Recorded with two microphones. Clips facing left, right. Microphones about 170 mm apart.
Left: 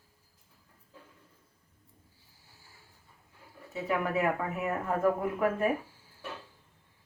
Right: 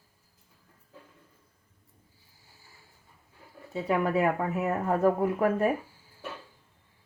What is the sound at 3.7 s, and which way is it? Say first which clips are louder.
Speech: right 4 dB; 30° right (ahead or behind).